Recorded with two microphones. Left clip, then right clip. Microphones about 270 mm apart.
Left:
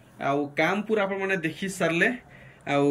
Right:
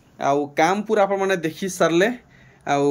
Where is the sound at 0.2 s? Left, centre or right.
Centre.